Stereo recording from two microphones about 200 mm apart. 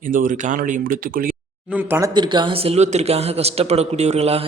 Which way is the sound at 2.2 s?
20° right (ahead or behind).